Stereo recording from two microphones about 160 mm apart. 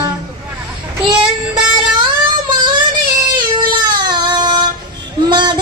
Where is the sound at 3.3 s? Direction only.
30° right (ahead or behind).